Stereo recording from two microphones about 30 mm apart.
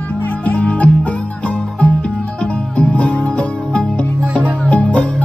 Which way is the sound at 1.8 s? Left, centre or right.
Left.